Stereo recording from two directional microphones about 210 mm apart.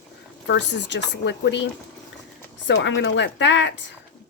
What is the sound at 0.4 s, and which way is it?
Speech, 55° left (ahead or behind).